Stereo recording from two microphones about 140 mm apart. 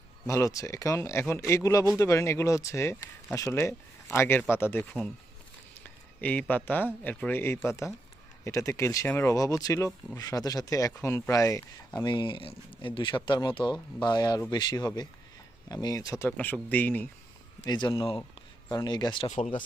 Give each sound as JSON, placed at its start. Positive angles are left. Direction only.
{"t": 0.3, "sound": "speech", "side_deg": 20}
{"t": 17.7, "sound": "speech", "side_deg": 30}